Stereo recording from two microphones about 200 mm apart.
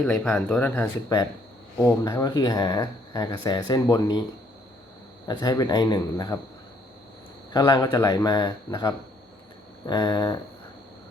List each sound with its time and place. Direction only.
0.0 s speech: 5° left (ahead or behind)
5.3 s speech: 20° left (ahead or behind)
7.5 s speech: 20° left (ahead or behind)